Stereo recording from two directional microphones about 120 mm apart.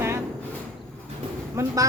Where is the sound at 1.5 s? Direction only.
30° right (ahead or behind).